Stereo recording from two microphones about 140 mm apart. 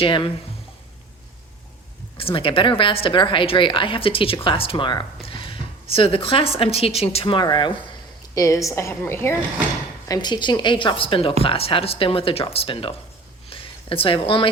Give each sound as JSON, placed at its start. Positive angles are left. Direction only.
{"t": 0.0, "sound": "speech", "side_deg": 35}
{"t": 2.1, "sound": "a woman's voice", "side_deg": 40}
{"t": 10.1, "sound": "a woman's voice", "side_deg": 30}